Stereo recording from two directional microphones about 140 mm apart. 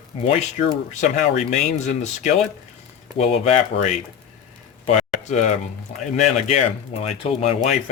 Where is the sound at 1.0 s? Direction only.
55° left (ahead or behind).